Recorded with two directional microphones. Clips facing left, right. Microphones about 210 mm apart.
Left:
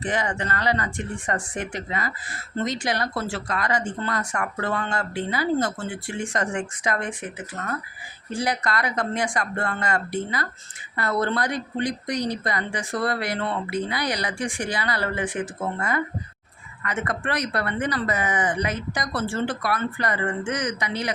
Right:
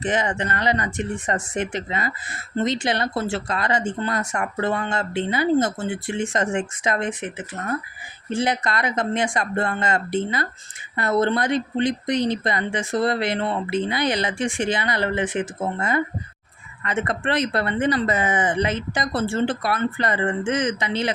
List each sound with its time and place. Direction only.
0.0 s speech: 20° right (ahead or behind)